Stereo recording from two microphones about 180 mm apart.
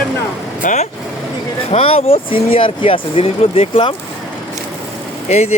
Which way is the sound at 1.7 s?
30° left (ahead or behind).